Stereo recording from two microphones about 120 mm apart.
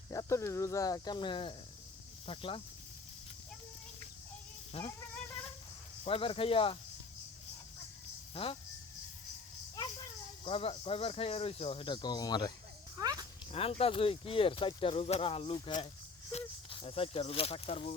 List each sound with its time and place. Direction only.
0.1 s speech: 25° left (ahead or behind); by 2.6 s 50° left (ahead or behind)
4.7 s a sound: 55° left (ahead or behind)
6.1 s speech: 50° left (ahead or behind)
8.4 s a sound: 55° left (ahead or behind)
10.4 s speech: 50° left (ahead or behind); by 12.5 s 35° left (ahead or behind)
13.0 s speech: 30° right (ahead or behind)
13.5 s speech: 55° left (ahead or behind)